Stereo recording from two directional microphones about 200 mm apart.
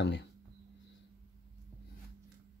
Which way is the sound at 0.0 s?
60° left (ahead or behind).